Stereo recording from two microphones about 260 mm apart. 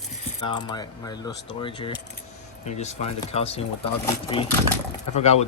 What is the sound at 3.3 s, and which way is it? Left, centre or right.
A man's voice, left.